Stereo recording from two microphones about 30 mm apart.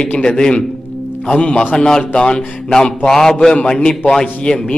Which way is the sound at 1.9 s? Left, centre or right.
Left.